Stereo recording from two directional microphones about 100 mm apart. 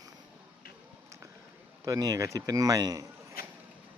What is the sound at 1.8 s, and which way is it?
A man's voice, 35° right (ahead or behind).